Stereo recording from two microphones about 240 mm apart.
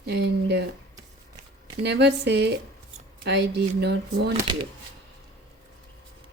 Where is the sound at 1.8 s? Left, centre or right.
Right.